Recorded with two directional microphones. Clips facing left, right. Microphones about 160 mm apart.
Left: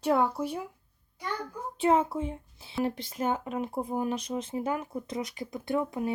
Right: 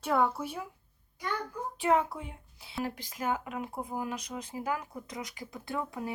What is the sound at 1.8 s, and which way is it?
Speech, 25° left (ahead or behind).